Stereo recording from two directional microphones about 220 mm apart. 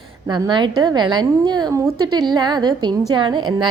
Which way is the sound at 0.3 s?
20° right (ahead or behind).